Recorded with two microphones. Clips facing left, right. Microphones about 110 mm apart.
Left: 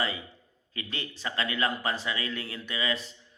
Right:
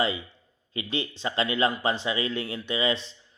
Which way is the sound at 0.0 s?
25° right (ahead or behind).